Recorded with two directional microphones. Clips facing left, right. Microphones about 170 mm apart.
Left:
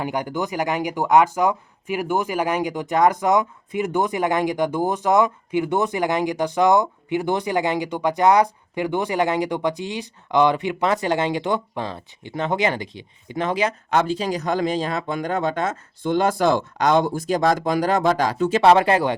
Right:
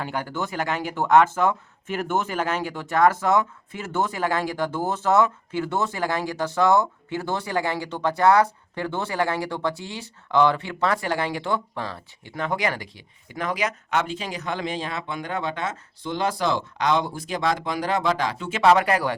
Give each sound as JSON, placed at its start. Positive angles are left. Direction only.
{"t": 0.0, "sound": "speech", "side_deg": 15}